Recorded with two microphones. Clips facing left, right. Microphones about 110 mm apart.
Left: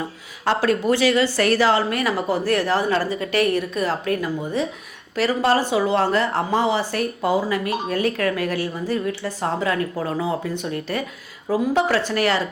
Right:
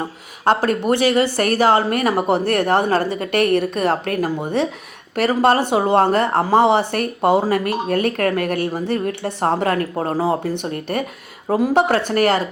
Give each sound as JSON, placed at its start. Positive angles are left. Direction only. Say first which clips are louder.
{"t": 0.4, "sound": "speech", "louder": "right 2 dB", "side_deg": -50}
{"t": 5.1, "sound": "speech", "louder": "right 3 dB", "side_deg": -50}